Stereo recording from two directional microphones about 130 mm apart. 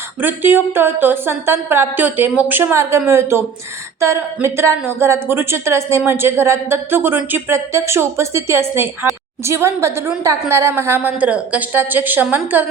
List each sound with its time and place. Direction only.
0.2 s speech: 15° right (ahead or behind)